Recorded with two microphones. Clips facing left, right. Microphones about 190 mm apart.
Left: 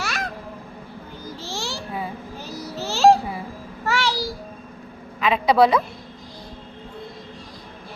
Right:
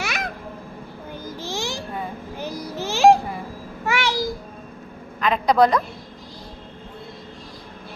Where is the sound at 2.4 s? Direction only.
15° right (ahead or behind).